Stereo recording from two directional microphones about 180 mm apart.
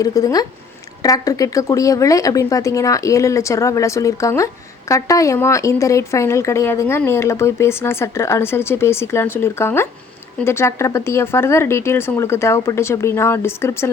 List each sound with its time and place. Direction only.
0.0 s a woman's voice: 20° left (ahead or behind)